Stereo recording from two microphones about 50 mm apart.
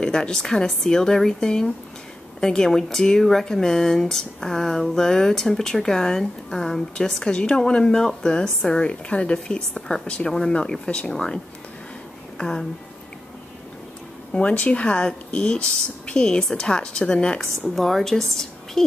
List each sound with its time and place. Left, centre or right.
0.0 s speech: centre
14.5 s speech: left; by 18.9 s centre